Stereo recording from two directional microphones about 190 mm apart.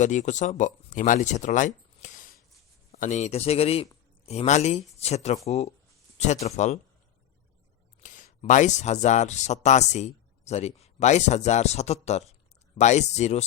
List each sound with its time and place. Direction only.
0.0 s speech: 40° left (ahead or behind)
8.0 s speech: 40° left (ahead or behind)